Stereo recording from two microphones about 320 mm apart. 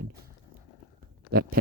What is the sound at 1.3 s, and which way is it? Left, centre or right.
Speech, right.